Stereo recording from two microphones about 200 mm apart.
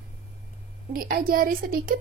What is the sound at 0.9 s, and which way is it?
A woman's voice, 45° right (ahead or behind).